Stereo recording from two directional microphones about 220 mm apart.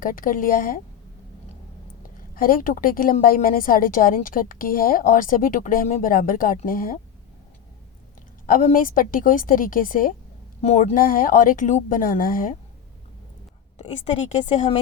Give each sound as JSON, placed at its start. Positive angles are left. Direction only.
{"t": 0.0, "sound": "a woman's voice", "side_deg": 40}
{"t": 2.3, "sound": "a woman's voice", "side_deg": 40}
{"t": 8.4, "sound": "a woman's voice", "side_deg": 40}
{"t": 13.7, "sound": "a woman's voice", "side_deg": 30}